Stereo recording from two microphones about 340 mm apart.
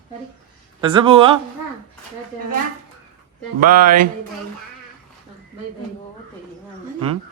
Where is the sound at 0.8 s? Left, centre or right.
Centre.